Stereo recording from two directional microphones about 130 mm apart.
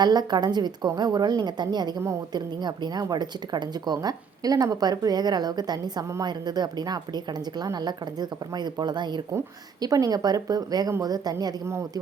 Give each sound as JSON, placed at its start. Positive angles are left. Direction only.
{"t": 0.0, "sound": "a woman's voice", "side_deg": -30}